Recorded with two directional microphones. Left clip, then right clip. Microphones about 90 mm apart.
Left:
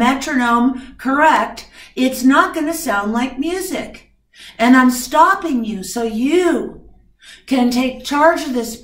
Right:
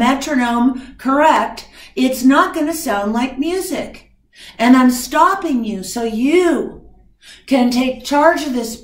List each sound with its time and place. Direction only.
0.0 s speech: 35° left (ahead or behind)